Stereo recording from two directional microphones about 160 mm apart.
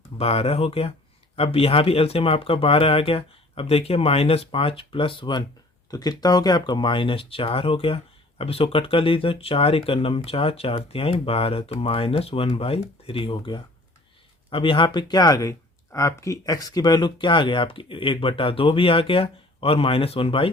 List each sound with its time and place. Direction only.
0.2 s speech: 40° left (ahead or behind)